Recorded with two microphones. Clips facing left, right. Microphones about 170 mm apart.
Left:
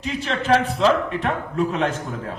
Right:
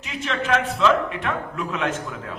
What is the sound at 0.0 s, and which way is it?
A man's voice, 35° left (ahead or behind).